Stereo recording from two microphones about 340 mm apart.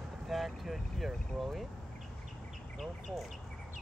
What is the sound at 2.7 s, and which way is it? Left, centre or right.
Speech, centre.